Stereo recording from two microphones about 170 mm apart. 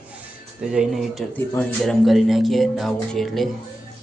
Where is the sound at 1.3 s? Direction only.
10° left (ahead or behind).